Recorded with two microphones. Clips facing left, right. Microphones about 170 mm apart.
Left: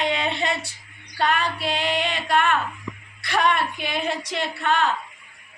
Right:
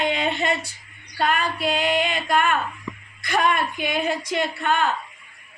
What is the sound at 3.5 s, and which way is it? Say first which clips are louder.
A woman's voice: right 1 dB; 45° right (ahead or behind).